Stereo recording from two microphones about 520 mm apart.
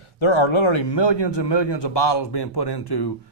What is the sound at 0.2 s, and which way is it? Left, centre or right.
Speech, left.